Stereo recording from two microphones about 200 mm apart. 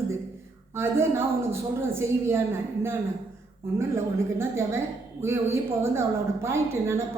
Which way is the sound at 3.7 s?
15° right (ahead or behind).